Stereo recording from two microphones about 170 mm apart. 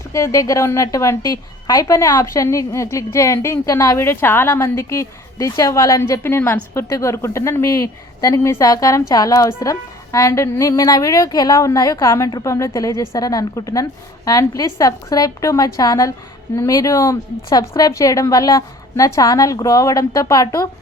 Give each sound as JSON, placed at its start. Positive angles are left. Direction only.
{"t": 0.1, "sound": "a woman's voice", "side_deg": 20}